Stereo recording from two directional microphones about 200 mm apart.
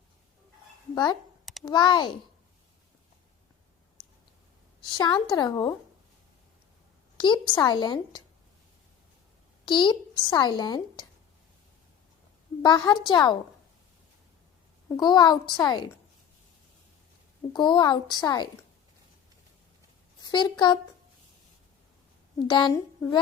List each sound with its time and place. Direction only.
1.6 s a child's voice: 20° left (ahead or behind)
4.8 s a woman's voice: 20° left (ahead or behind)
7.2 s a child's voice: 25° left (ahead or behind)
9.6 s a child's voice: 25° left (ahead or behind)
12.6 s a child's voice: 20° left (ahead or behind)
14.8 s a child's voice: 20° left (ahead or behind)
17.5 s a child's voice: 20° left (ahead or behind)
20.2 s a child's voice: 20° left (ahead or behind)
22.4 s a child's voice: 20° left (ahead or behind)